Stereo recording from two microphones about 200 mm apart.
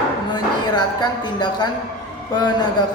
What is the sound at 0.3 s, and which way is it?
A woman's voice, 20° left (ahead or behind).